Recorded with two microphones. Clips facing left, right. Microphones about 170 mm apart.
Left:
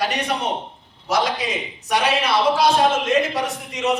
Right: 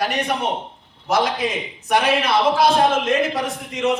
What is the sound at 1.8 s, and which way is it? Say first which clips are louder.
A man's voice: right 2 dB; 55° right (ahead or behind).